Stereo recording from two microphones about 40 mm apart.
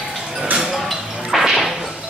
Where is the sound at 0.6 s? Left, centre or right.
Centre.